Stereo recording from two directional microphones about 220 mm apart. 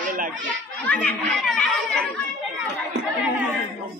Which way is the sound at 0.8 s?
5° left (ahead or behind).